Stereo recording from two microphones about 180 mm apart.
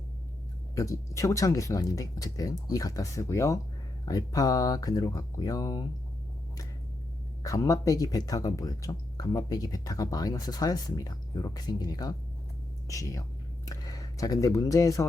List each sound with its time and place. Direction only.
0.8 s speech: 15° left (ahead or behind)
7.4 s speech: 20° left (ahead or behind)